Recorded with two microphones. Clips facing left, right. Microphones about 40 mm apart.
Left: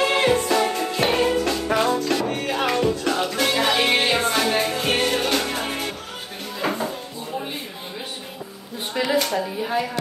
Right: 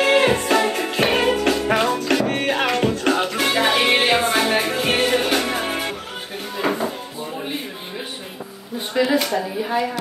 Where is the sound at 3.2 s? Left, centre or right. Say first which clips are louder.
Right 2 dB; centre.